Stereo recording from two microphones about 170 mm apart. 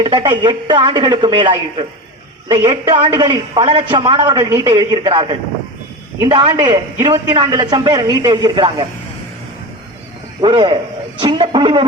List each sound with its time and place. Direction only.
0.0 s a man's voice: 25° right (ahead or behind)
10.4 s a man's voice: 30° right (ahead or behind)